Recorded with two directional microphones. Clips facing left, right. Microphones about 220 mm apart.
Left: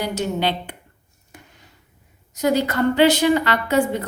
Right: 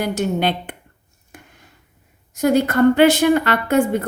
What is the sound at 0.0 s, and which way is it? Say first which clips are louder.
Speech: right 3 dB; 50° right (ahead or behind).